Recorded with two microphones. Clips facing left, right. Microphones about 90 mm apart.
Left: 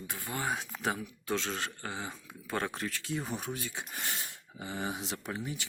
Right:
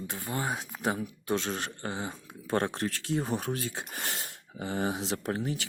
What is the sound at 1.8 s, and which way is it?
Speech, 35° right (ahead or behind).